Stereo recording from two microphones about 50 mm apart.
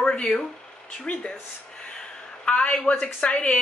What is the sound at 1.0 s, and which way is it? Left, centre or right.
Speech, left.